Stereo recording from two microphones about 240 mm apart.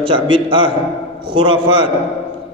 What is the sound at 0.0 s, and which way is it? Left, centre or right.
Speech, right.